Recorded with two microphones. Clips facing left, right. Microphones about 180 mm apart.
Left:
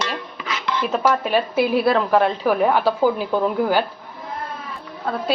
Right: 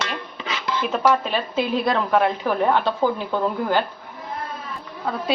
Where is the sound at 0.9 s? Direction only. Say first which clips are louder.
Left 1 dB; 5° left (ahead or behind).